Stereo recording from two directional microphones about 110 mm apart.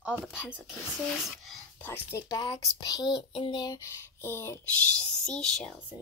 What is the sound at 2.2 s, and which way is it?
Speech, 35° left (ahead or behind).